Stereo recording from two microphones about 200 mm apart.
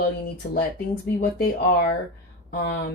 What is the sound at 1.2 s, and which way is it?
Speech, 50° left (ahead or behind).